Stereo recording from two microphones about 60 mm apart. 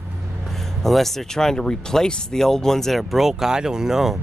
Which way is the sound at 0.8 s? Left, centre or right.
Centre.